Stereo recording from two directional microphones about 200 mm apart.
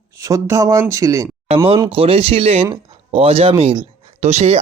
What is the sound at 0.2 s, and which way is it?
Speech, 15° right (ahead or behind).